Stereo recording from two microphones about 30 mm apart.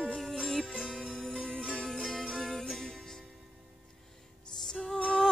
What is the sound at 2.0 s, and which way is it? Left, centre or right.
Music, centre.